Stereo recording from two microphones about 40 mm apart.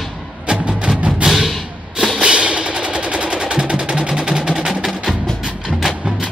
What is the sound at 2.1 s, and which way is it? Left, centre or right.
Music, right.